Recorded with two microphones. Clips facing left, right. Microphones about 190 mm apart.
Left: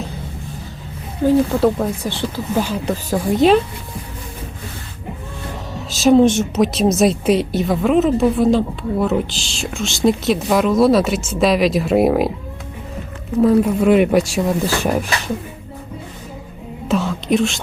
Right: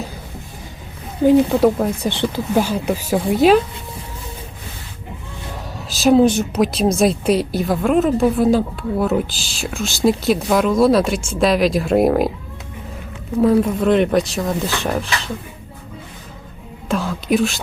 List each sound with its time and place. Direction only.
1.3 s a woman's voice: 15° right (ahead or behind)
5.9 s a woman's voice: centre (ahead or behind)
13.4 s speech: 5° left (ahead or behind)
16.9 s whispering: centre (ahead or behind)